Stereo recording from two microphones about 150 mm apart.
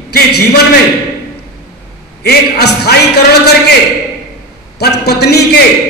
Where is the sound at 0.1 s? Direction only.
90° left.